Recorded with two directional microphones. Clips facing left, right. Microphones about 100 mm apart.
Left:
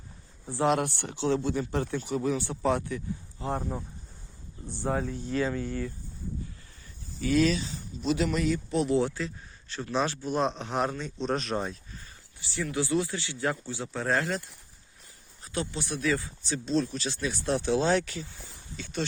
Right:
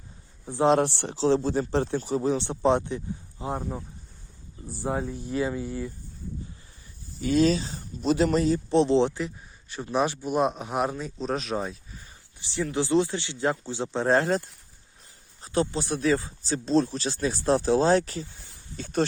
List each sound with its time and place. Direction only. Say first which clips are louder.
0.4 s speech: right 5 dB; 20° right (ahead or behind)
3.5 s speech: even; 5° right (ahead or behind)
7.2 s speech: right 3 dB; 30° right (ahead or behind); by 11.8 s centre (ahead or behind)
12.4 s speech: right 3 dB; 20° right (ahead or behind); by 19.0 s 45° right (ahead or behind)